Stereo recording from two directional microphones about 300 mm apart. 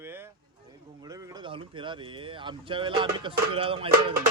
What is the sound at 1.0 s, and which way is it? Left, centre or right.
Speech, centre.